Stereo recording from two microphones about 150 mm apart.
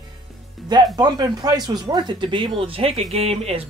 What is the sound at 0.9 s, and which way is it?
Speech, 25° right (ahead or behind).